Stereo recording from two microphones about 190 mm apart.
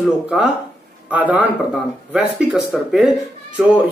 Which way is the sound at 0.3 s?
5° right (ahead or behind).